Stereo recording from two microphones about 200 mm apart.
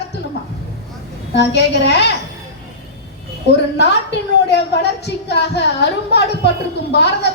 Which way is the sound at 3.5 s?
60° left (ahead or behind).